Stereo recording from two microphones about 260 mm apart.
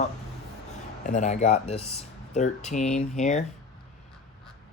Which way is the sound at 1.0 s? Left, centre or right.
Left.